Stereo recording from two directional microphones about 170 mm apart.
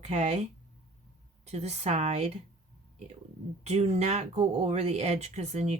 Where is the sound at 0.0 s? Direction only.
40° right (ahead or behind).